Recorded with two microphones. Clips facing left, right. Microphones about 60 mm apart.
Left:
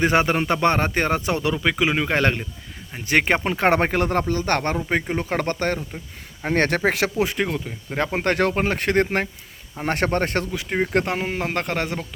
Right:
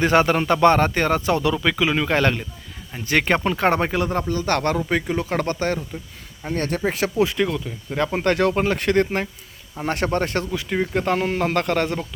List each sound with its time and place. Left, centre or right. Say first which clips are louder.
0.0 s a man's voice: right 2 dB; left
3.7 s speech: left 3 dB; left
4.9 s speech: right 1 dB; left
6.5 s speech: left 3 dB; left
7.2 s a man's voice: right 2 dB; left
10.5 s a man's voice: left 1 dB; left